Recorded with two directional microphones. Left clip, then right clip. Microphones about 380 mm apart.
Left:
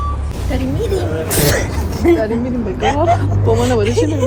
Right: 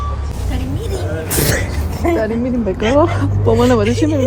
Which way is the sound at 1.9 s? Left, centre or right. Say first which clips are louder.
Left 3 dB; right.